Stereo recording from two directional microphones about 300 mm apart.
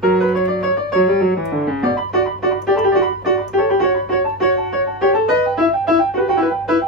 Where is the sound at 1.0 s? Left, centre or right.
Centre.